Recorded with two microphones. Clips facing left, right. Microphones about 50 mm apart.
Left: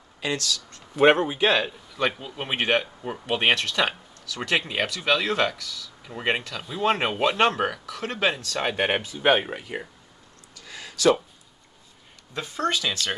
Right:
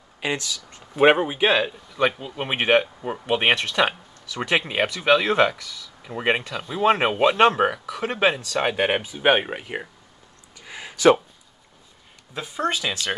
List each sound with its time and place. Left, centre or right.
0.2 s speech: centre
10.6 s a sound: right
12.4 s speech: centre